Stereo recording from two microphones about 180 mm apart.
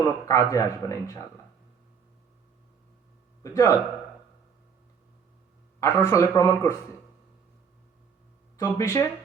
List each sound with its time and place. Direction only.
0.0 s speech: 15° left (ahead or behind)
3.4 s speech: 15° left (ahead or behind)
5.8 s speech: 15° left (ahead or behind)
8.5 s speech: 15° left (ahead or behind)